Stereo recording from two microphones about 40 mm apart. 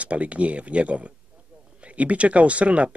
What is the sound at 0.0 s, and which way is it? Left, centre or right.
Speech, right.